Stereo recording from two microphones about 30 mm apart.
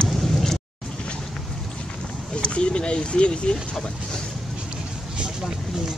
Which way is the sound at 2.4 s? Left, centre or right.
Left.